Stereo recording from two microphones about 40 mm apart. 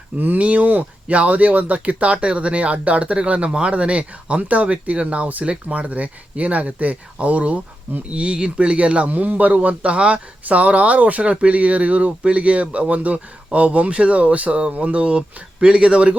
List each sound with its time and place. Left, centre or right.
0.3 s speech: right
9.6 s speech: right